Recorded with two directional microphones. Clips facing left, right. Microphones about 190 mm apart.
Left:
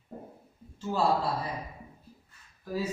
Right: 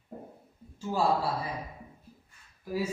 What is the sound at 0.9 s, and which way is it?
Speech, 10° right (ahead or behind).